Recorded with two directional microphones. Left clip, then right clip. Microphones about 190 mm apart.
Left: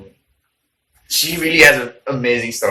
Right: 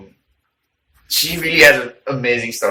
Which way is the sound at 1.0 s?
10° left (ahead or behind).